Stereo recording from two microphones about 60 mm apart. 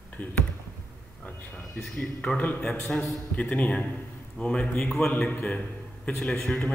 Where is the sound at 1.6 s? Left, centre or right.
Centre.